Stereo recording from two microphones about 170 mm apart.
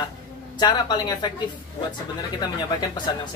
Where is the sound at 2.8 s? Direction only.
25° left (ahead or behind).